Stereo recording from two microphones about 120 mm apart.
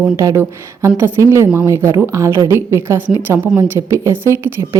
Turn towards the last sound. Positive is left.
turn(degrees=-20)  # may be behind; listen again after turning